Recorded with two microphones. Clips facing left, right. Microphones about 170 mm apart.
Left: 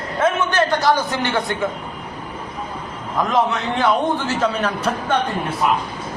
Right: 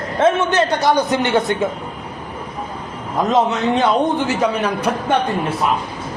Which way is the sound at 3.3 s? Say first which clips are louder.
Right 4 dB; 20° right (ahead or behind).